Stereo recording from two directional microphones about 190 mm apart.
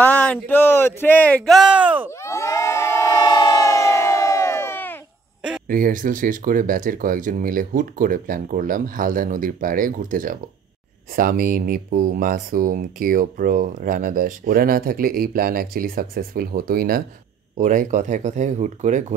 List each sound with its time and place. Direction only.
0.0 s speech: 5° left (ahead or behind)
2.0 s crowd: 15° left (ahead or behind)
5.7 s speech: 45° right (ahead or behind)